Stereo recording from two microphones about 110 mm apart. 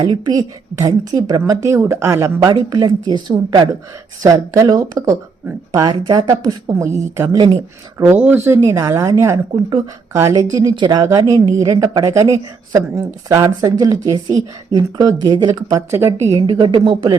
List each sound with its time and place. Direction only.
0.0 s a woman's voice: 40° right (ahead or behind)
4.2 s a woman's voice: 35° right (ahead or behind)
7.3 s speech: 45° right (ahead or behind)
8.0 s speech: 15° right (ahead or behind)
8.4 s a woman's voice: 25° right (ahead or behind)
15.9 s a woman's voice: 25° right (ahead or behind)
16.3 s speech: 50° right (ahead or behind)